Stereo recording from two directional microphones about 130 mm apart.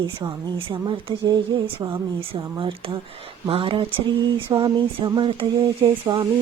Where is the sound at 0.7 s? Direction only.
40° right (ahead or behind).